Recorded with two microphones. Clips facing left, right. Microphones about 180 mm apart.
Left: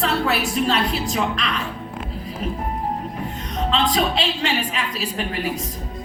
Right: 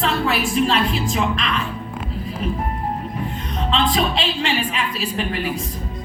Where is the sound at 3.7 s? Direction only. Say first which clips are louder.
Right 1 dB; 40° left (ahead or behind).